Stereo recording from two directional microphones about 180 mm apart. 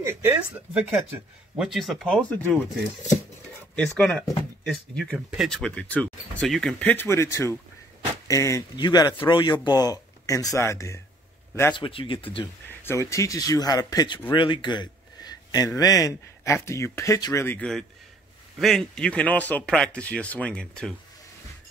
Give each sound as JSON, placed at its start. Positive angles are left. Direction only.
{"t": 0.0, "sound": "speech", "side_deg": -15}
{"t": 3.7, "sound": "speech", "side_deg": 5}
{"t": 11.7, "sound": "speech", "side_deg": 30}
{"t": 12.6, "sound": "a man's voice", "side_deg": 15}